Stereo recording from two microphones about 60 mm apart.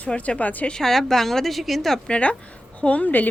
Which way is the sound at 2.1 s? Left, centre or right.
Left.